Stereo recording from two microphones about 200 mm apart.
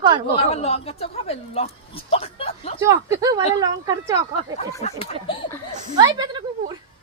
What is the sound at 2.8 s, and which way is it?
Speech, 15° right (ahead or behind).